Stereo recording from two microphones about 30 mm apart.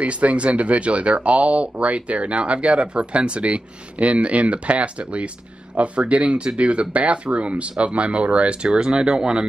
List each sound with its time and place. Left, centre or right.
0.0 s speech: right
8.6 s speech: right